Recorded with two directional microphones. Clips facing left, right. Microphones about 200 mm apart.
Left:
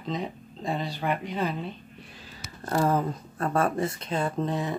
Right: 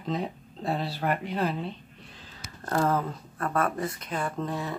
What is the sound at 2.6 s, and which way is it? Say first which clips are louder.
Speech: left 1 dB; 15° left (ahead or behind).